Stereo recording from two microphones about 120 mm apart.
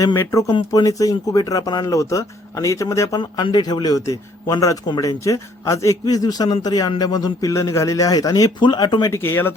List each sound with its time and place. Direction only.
0.2 s speech: 25° left (ahead or behind)
3.2 s a man's voice: 40° left (ahead or behind)
9.1 s speech: 20° left (ahead or behind)